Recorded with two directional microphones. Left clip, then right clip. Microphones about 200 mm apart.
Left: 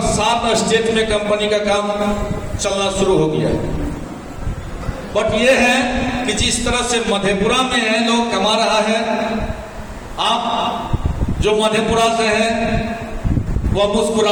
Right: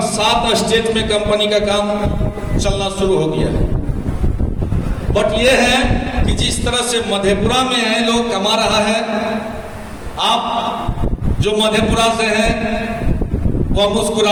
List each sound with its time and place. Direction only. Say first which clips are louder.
0.2 s a man's voice: right 3 dB; 30° right (ahead or behind)
5.1 s a man's voice: right 1 dB; 30° right (ahead or behind)
11.4 s a man's voice: even; 25° right (ahead or behind)
13.7 s a man's voice: even; 25° right (ahead or behind)